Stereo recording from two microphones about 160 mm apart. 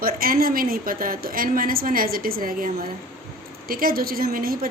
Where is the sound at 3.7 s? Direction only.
65° right (ahead or behind).